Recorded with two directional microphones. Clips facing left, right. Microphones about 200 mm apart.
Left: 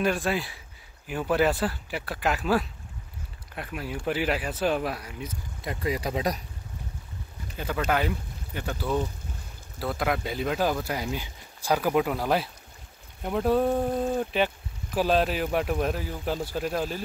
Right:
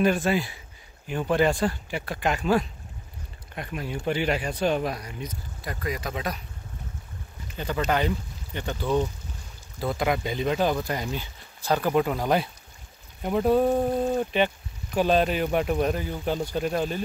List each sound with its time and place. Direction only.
0.0 s speech: centre (ahead or behind)
5.6 s speech: 25° left (ahead or behind)
7.5 s speech: 5° left (ahead or behind)